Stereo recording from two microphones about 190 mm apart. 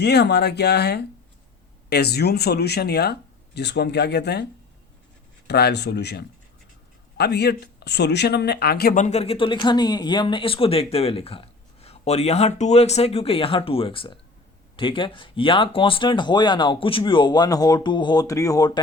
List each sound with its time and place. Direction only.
0.0 s speech: 60° left (ahead or behind)
5.5 s speech: 60° left (ahead or behind)
9.0 s speech: 35° left (ahead or behind)